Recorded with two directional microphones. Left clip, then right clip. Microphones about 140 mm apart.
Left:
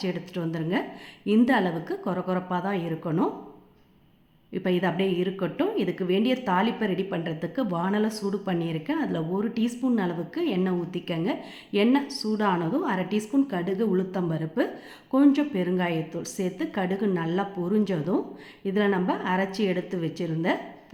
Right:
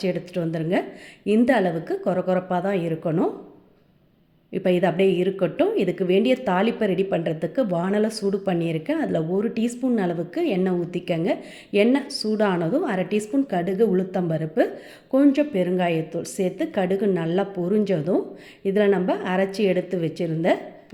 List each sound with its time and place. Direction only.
0.0 s a woman's voice: 25° right (ahead or behind)
4.5 s a woman's voice: 25° right (ahead or behind)